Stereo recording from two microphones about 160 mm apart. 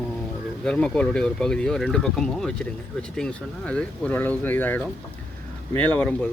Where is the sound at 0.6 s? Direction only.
5° left (ahead or behind).